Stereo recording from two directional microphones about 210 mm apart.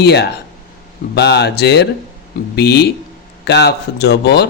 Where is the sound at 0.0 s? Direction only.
50° left (ahead or behind).